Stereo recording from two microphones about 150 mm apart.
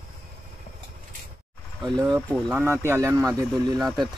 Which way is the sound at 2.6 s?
15° right (ahead or behind).